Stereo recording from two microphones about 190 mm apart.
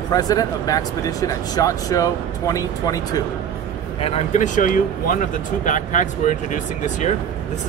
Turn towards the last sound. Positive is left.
turn(degrees=40)  # may be behind; listen again after turning